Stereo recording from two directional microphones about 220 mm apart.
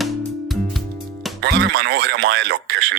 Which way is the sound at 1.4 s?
50° right (ahead or behind).